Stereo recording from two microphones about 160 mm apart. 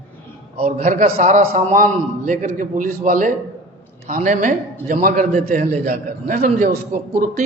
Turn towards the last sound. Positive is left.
turn(degrees=-55)  # may be behind; listen again after turning